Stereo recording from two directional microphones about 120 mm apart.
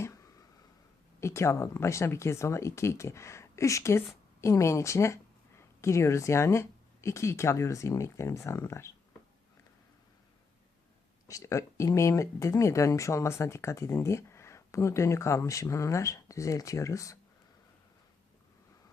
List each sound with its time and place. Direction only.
0.0 s a sound: 25° left (ahead or behind)
1.2 s speech: 25° left (ahead or behind)
11.3 s speech: 25° left (ahead or behind)